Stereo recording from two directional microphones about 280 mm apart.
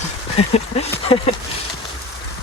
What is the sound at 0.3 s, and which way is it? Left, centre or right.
Speech, left.